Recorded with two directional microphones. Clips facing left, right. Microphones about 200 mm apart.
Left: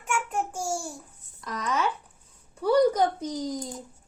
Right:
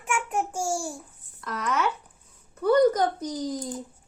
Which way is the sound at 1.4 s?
15° left (ahead or behind).